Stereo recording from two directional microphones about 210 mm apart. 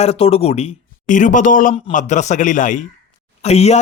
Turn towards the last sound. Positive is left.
turn(degrees=30)  # may be behind; listen again after turning